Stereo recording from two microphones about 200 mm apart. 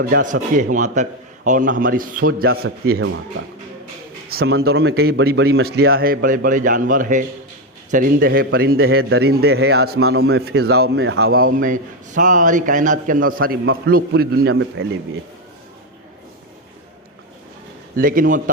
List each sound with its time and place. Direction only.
0.0 s a man's voice: 40° right (ahead or behind)
4.3 s speech: 50° right (ahead or behind)
11.6 s a man's voice: 40° right (ahead or behind)
14.5 s a man's voice: 80° right
17.9 s speech: 45° right (ahead or behind)